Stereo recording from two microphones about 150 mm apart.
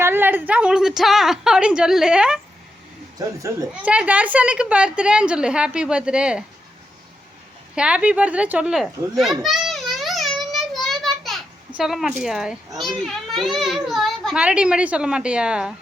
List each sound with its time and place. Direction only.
0.0 s a child's voice: 15° right (ahead or behind)
3.2 s speech: 20° right (ahead or behind)
3.7 s a woman's voice: 10° right (ahead or behind)
7.8 s children playing: 10° right (ahead or behind)
11.8 s a child's voice: centre (ahead or behind)